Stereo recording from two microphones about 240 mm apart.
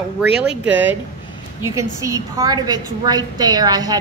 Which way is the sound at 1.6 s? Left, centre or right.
Centre.